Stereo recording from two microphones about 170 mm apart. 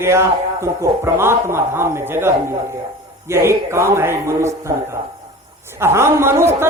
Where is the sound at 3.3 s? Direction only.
15° right (ahead or behind).